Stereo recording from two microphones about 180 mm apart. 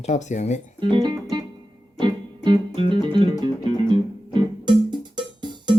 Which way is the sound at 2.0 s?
25° right (ahead or behind).